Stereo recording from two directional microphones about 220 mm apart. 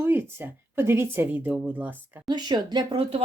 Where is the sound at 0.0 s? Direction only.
10° right (ahead or behind).